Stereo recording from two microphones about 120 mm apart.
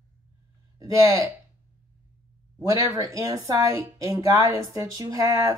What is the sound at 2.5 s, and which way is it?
Speech, 30° right (ahead or behind).